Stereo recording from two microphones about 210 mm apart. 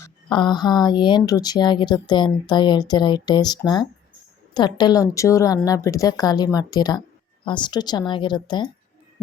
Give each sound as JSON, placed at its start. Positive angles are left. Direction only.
{"t": 0.0, "sound": "speech", "side_deg": 20}